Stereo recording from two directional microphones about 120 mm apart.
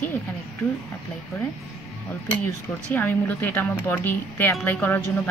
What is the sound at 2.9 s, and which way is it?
Speech, 15° left (ahead or behind).